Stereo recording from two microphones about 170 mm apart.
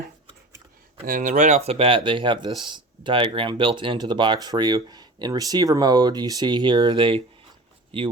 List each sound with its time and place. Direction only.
1.0 s speech: 50° right (ahead or behind); by 8.1 s 30° right (ahead or behind)